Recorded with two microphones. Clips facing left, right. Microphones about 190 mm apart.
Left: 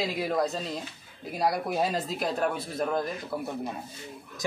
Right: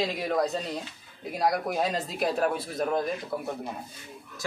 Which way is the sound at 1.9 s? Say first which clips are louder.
Right 1 dB; centre (ahead or behind).